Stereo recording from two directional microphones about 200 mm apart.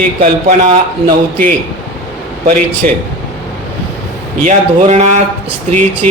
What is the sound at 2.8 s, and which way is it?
Speech, 45° right (ahead or behind).